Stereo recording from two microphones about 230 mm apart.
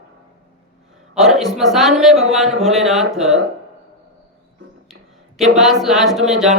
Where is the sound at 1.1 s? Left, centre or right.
Centre.